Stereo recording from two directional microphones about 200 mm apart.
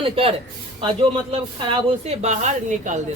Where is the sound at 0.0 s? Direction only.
30° right (ahead or behind).